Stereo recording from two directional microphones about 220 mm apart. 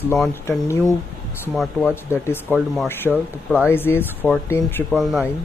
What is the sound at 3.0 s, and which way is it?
Speech, 5° right (ahead or behind).